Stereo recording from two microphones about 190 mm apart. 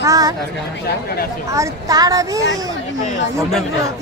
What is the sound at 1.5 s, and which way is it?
Speech, 15° right (ahead or behind).